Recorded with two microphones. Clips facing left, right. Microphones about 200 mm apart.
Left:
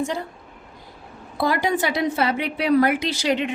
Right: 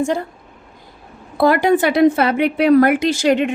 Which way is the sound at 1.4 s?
55° right (ahead or behind).